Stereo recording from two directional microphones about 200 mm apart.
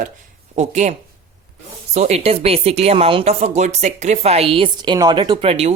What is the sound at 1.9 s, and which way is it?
Speech, 35° right (ahead or behind).